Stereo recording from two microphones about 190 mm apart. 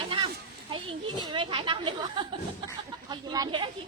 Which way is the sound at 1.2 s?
25° right (ahead or behind).